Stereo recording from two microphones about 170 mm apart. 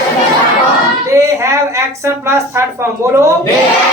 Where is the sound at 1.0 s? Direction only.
20° right (ahead or behind).